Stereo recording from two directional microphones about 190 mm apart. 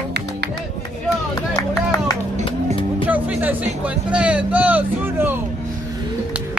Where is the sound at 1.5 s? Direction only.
20° left (ahead or behind).